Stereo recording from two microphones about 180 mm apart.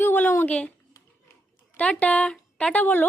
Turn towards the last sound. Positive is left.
turn(degrees=10)  # may be behind; listen again after turning